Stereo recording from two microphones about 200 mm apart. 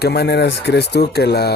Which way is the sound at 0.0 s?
55° left (ahead or behind).